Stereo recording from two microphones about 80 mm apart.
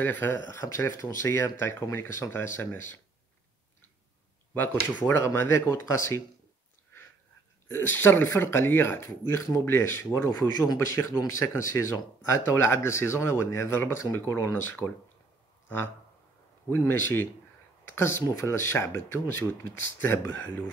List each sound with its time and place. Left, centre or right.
0.0 s speech: left
0.5 s a man's voice: left
4.6 s a man's voice: left
7.6 s a man's voice: left
16.6 s a man's voice: left